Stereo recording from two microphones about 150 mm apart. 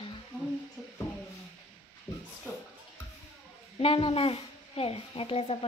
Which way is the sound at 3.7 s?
40° left (ahead or behind).